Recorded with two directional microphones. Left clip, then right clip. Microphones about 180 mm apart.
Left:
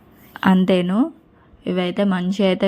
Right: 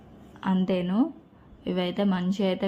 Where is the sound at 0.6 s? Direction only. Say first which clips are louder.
Left 8 dB; 30° left (ahead or behind).